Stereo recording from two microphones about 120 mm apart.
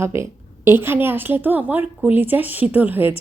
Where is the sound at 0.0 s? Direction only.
20° right (ahead or behind).